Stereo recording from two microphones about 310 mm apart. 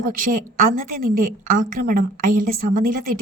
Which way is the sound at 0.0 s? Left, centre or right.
Right.